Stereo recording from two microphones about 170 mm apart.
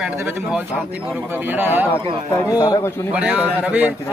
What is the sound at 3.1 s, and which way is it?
Speech, 10° right (ahead or behind).